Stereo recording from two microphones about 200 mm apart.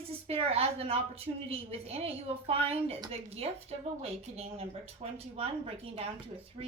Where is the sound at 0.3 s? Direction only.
30° right (ahead or behind).